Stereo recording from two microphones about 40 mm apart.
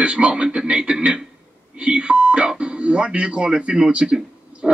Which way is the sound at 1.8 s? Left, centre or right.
Right.